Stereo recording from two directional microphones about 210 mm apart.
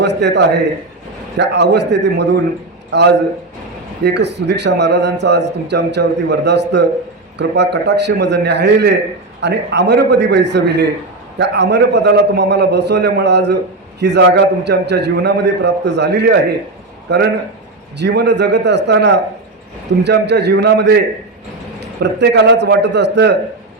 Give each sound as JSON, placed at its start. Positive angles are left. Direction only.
{"t": 0.0, "sound": "a man's voice", "side_deg": -55}